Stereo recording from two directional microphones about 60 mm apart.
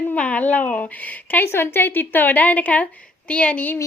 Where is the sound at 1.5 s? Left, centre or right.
Left.